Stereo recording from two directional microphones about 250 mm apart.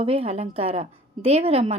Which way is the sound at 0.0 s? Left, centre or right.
Right.